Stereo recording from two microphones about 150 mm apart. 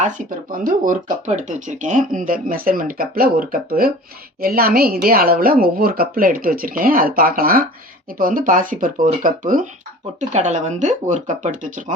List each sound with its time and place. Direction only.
0.0 s speech: 65° right (ahead or behind)
10.2 s speech: 50° right (ahead or behind)